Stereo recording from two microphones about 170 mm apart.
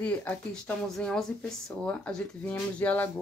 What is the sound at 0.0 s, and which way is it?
Speech, 10° left (ahead or behind).